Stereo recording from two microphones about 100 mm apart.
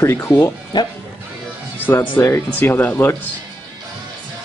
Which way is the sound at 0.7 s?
45° left (ahead or behind).